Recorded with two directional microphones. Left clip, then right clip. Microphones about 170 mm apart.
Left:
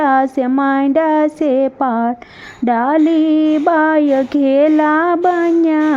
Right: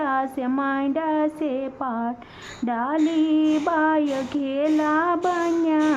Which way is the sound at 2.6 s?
40° left (ahead or behind).